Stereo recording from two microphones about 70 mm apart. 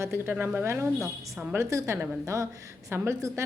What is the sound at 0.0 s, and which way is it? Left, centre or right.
A woman's voice, right.